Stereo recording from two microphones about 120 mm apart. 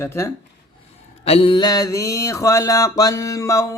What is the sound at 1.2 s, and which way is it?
Mantra, 55° left (ahead or behind).